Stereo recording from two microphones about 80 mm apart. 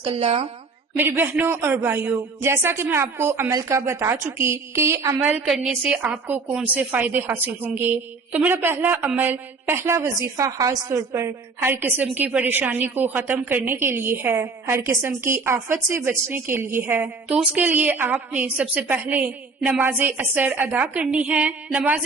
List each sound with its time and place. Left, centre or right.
0.9 s a woman's voice: right
6.0 s a woman's voice: right
17.2 s a woman's voice: centre
17.6 s a woman's voice: right